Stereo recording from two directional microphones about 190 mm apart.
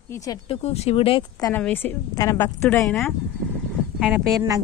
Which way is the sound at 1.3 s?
20° left (ahead or behind).